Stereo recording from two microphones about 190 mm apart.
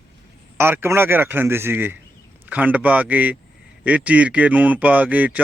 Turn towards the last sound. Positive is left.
turn(degrees=-10)  # may be behind; listen again after turning